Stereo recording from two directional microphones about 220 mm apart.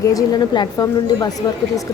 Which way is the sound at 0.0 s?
15° left (ahead or behind).